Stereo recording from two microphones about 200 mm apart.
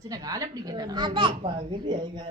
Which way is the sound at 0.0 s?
15° right (ahead or behind).